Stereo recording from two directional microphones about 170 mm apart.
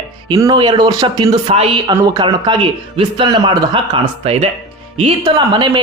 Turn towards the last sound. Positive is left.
turn(degrees=-25)  # may be behind; listen again after turning